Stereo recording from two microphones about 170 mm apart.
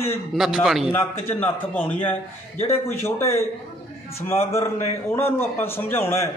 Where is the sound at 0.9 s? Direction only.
15° left (ahead or behind).